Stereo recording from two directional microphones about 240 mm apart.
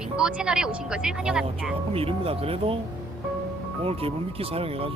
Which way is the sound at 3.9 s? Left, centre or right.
Right.